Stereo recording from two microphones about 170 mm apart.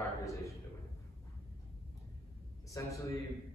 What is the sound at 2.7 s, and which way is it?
Speech, 20° left (ahead or behind).